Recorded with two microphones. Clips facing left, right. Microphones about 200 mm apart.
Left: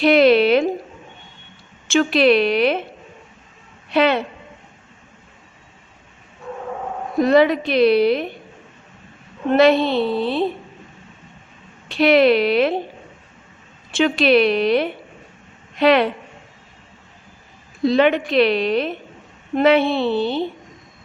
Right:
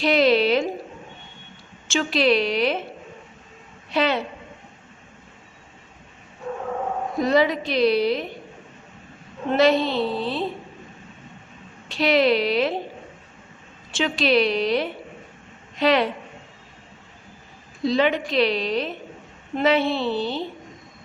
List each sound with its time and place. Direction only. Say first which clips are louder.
0.0 s a sound: left 5 dB; 60° left (ahead or behind)
1.9 s a woman's voice: left 5 dB; 60° left (ahead or behind)
3.8 s a woman's voice: left 5 dB; 60° left (ahead or behind)
7.2 s a woman's voice: left 6 dB; 60° left (ahead or behind)
9.5 s a woman's voice: left 4 dB; 60° left (ahead or behind)
11.9 s a woman's voice: left 5 dB; 60° left (ahead or behind)
13.9 s a woman's voice: left 5 dB; 60° left (ahead or behind)
17.8 s a woman's voice: left 5 dB; 60° left (ahead or behind)